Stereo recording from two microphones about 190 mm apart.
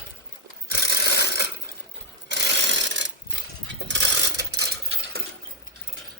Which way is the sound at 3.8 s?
65° right (ahead or behind).